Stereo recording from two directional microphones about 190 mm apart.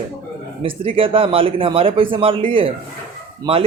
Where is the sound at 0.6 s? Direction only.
30° right (ahead or behind).